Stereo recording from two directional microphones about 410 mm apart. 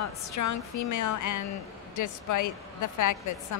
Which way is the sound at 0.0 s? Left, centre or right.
Left.